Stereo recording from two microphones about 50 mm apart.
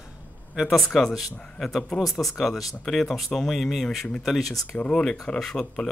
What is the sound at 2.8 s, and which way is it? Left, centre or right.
Speech, centre.